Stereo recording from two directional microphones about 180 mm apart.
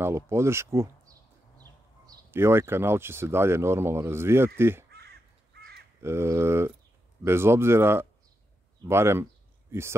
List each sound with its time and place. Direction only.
0.0 s speech: 15° right (ahead or behind)
4.9 s crow: 65° right (ahead or behind)
6.0 s speech: 15° right (ahead or behind)